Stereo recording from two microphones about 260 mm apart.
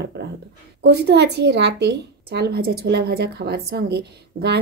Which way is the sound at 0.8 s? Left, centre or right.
Right.